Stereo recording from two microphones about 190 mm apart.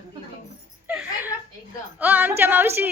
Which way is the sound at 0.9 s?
10° right (ahead or behind).